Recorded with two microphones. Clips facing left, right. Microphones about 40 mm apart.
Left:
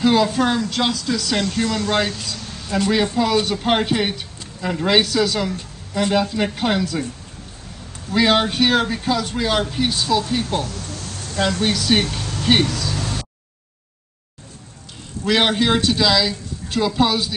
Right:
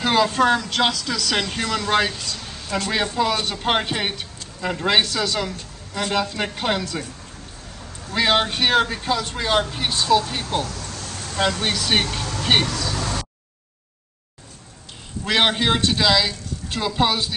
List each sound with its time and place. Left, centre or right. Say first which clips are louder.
0.0 s speech: left 3 dB; right
0.4 s speech: right 1 dB; right
1.4 s speech: left 3 dB; right
2.0 s speech: left 1 dB; centre
8.1 s a woman's voice: left 3 dB; centre
15.2 s a woman's voice: left 2 dB; centre